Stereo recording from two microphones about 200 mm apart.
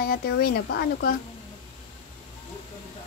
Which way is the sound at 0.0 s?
50° left (ahead or behind).